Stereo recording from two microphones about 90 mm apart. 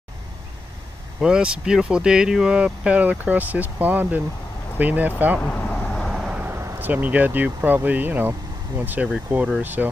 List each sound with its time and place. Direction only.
1.2 s speech: 10° right (ahead or behind)
5.4 s vehicle: 20° left (ahead or behind)
6.0 s vehicle: 5° right (ahead or behind)
6.3 s speech: 25° right (ahead or behind)